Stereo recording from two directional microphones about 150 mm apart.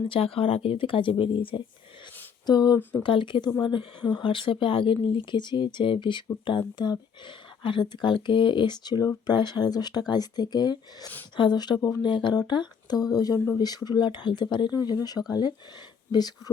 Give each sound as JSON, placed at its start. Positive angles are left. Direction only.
{"t": 0.1, "sound": "speech", "side_deg": 40}